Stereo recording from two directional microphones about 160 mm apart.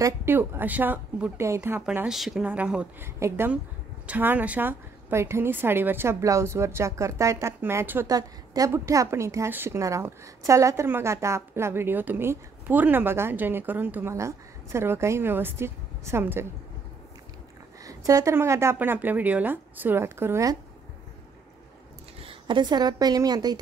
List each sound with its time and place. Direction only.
0.0 s a woman's voice: 15° right (ahead or behind)
17.8 s a woman's voice: 20° right (ahead or behind)
22.2 s a woman's voice: 30° right (ahead or behind)